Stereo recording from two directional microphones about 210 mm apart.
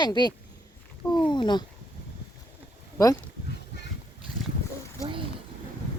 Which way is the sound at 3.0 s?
15° left (ahead or behind).